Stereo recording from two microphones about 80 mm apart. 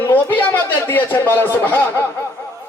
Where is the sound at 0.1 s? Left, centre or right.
Left.